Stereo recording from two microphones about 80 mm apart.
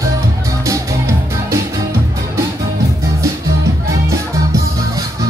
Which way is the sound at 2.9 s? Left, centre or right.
Right.